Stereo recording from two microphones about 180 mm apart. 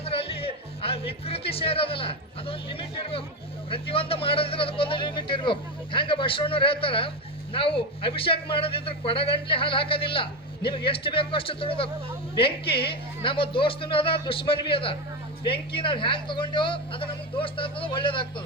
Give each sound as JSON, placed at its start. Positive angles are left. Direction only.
{"t": 0.0, "sound": "music", "side_deg": 30}
{"t": 3.7, "sound": "speech", "side_deg": 30}